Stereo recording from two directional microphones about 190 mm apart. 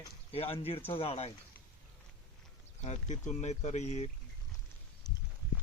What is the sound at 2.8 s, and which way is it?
Speech, 40° left (ahead or behind).